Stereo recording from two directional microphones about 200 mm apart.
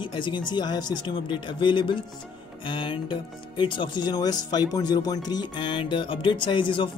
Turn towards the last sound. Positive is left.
turn(degrees=25)  # may be behind; listen again after turning